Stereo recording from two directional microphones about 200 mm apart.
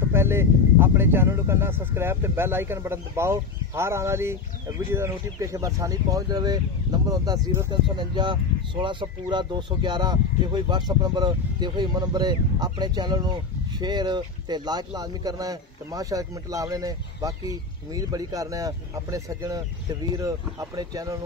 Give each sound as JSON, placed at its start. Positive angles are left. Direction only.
{"t": 0.1, "sound": "speech", "side_deg": -10}